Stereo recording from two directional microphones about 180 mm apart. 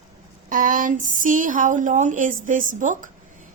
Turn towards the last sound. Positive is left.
turn(degrees=-45)  # may be behind; listen again after turning